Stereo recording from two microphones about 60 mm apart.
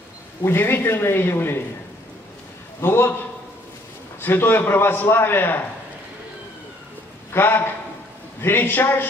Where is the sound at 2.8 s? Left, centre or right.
Left.